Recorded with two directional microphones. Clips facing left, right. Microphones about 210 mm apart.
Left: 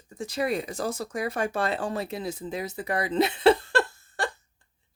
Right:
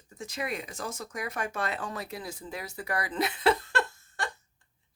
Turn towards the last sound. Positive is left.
turn(degrees=30)  # may be behind; listen again after turning